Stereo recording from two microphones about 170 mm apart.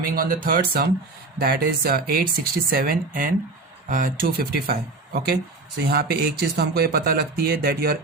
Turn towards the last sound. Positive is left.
turn(degrees=-70)  # may be behind; listen again after turning